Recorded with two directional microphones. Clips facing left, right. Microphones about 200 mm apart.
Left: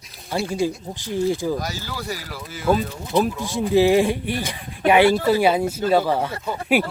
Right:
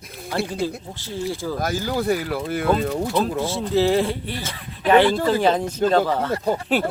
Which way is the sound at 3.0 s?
15° left (ahead or behind).